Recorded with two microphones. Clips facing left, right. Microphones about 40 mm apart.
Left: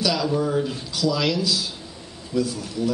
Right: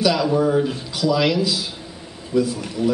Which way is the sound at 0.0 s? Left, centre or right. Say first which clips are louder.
Right 5 dB; centre.